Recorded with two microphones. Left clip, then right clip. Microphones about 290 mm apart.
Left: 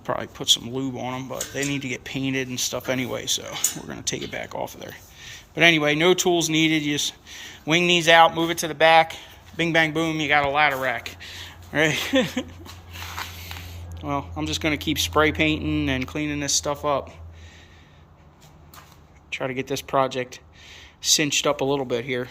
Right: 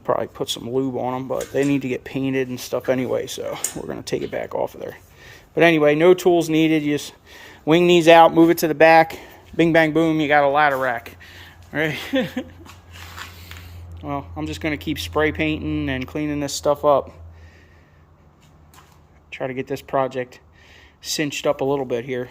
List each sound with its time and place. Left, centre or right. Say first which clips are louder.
0.0 s a man's voice: right 5 dB; centre
12.9 s a sound: left 4 dB; centre
14.0 s speech: even; centre
19.3 s speech: right 1 dB; centre